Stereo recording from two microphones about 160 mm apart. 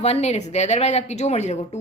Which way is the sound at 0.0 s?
40° left (ahead or behind).